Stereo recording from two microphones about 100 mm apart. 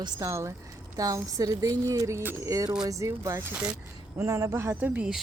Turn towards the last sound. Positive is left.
turn(degrees=-20)  # may be behind; listen again after turning